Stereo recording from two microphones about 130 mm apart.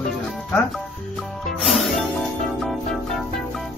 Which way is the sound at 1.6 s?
Centre (ahead or behind).